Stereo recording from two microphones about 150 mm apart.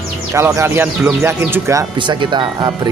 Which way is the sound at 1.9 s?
30° right (ahead or behind).